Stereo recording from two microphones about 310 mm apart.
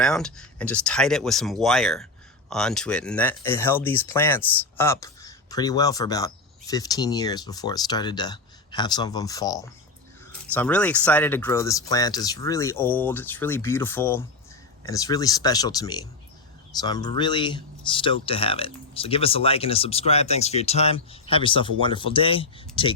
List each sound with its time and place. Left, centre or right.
0.0 s speech: centre